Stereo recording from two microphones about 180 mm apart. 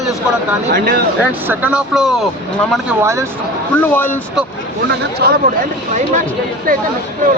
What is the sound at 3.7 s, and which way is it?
Speech, 10° left (ahead or behind).